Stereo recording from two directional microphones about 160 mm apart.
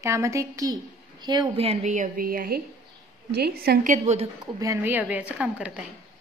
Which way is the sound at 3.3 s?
80° right.